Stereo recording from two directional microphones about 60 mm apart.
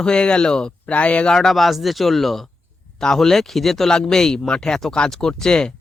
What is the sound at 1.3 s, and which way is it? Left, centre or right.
Speech, centre.